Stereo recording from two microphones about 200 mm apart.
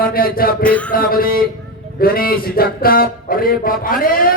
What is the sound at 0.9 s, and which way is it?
Speech, 45° left (ahead or behind).